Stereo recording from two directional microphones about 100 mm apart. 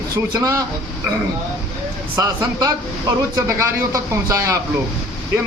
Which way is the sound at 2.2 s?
35° right (ahead or behind).